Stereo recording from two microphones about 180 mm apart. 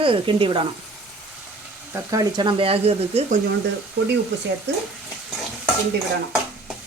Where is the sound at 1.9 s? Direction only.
20° right (ahead or behind); by 3.4 s 35° right (ahead or behind).